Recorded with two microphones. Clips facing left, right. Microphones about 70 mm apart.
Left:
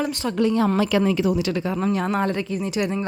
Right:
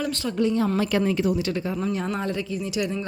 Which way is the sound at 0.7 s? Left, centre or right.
Left.